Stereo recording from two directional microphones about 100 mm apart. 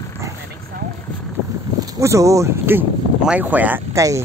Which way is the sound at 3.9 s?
30° right (ahead or behind).